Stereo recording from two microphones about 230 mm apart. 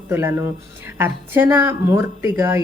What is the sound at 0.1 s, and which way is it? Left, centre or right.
Speech, centre.